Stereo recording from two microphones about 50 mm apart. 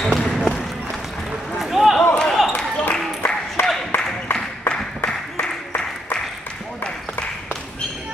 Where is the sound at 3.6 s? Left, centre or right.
Left.